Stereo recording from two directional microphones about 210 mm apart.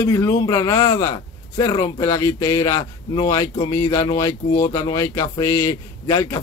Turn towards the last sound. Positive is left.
turn(degrees=15)  # may be behind; listen again after turning